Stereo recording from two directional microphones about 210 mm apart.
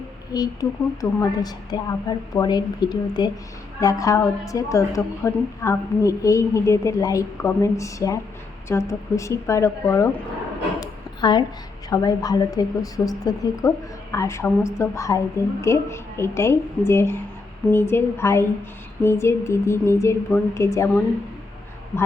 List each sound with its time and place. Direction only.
0.3 s a woman's voice: 15° left (ahead or behind)
10.8 s a sound: 20° left (ahead or behind)
11.9 s a woman's voice: 15° left (ahead or behind)